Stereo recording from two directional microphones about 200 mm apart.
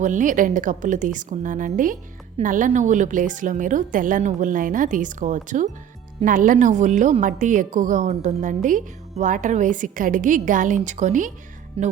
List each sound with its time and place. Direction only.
0.0 s a woman's voice: 40° right (ahead or behind)